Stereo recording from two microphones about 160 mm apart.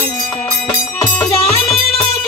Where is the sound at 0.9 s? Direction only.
10° left (ahead or behind).